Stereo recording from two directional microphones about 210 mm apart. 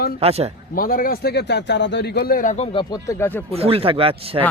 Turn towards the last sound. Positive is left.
turn(degrees=-25)  # may be behind; listen again after turning